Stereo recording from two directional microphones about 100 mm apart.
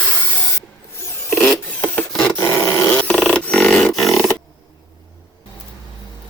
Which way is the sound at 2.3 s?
25° left (ahead or behind).